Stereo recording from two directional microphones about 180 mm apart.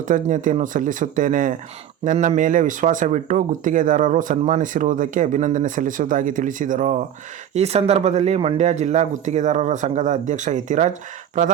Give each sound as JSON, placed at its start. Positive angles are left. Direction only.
{"t": 0.1, "sound": "speech", "side_deg": -45}